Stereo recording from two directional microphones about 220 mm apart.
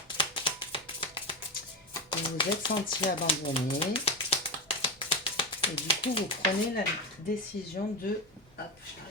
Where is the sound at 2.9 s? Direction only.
25° left (ahead or behind).